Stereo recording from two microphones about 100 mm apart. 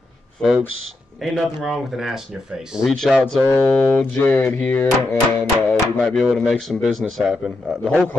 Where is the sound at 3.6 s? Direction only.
25° left (ahead or behind).